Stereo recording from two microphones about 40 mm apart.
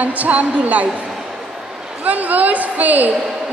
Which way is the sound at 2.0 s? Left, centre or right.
Right.